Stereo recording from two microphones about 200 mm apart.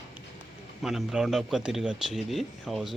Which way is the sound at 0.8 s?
Centre (ahead or behind).